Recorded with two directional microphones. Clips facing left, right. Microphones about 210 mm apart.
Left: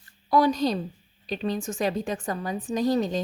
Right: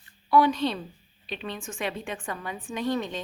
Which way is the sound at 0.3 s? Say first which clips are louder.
Left 1 dB; 40° left (ahead or behind).